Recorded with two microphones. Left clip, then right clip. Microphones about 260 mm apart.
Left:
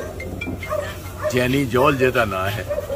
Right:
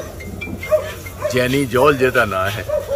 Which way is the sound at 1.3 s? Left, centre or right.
Centre.